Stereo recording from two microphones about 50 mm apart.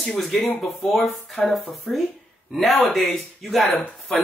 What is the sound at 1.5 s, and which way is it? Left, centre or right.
Speech, centre.